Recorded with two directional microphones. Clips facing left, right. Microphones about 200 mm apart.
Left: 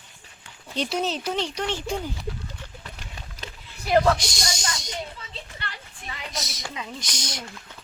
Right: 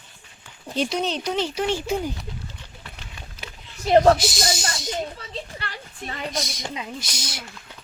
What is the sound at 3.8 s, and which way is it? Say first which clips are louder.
Speech: right 5 dB; 25° right (ahead or behind).